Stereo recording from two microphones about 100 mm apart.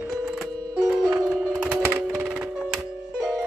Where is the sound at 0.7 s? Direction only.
25° right (ahead or behind).